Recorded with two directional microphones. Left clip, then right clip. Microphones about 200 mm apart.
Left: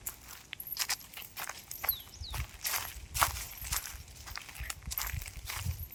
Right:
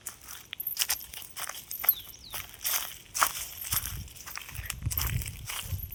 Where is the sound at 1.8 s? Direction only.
55° right (ahead or behind).